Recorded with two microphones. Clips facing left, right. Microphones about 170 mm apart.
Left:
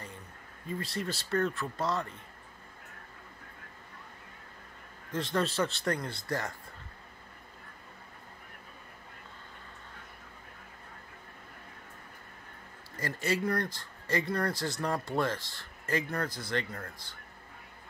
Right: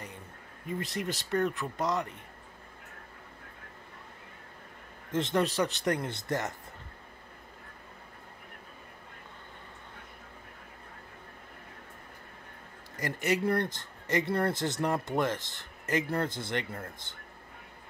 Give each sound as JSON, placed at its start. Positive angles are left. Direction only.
{"t": 0.7, "sound": "speech", "side_deg": -20}
{"t": 5.1, "sound": "speech", "side_deg": -20}
{"t": 12.9, "sound": "speech", "side_deg": -20}